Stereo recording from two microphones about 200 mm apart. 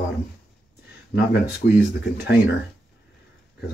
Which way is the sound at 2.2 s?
60° left (ahead or behind).